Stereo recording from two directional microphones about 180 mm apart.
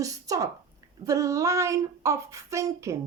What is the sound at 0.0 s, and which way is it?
Speech, 20° right (ahead or behind).